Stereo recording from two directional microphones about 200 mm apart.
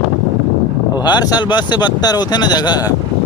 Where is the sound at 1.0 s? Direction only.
20° left (ahead or behind).